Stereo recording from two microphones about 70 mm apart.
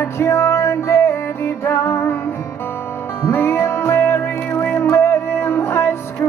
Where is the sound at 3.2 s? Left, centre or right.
Left.